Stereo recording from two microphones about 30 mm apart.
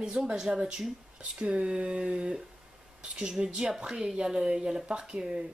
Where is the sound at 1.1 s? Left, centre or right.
Right.